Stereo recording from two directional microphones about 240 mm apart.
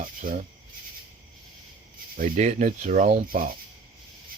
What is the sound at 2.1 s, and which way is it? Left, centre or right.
Speech, right.